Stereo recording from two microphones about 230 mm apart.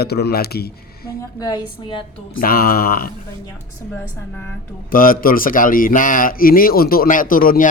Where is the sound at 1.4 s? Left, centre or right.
Centre.